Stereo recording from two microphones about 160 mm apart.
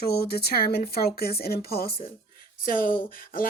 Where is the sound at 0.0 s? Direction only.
80° left.